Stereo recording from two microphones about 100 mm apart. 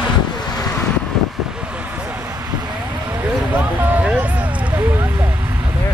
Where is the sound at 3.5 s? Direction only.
15° right (ahead or behind).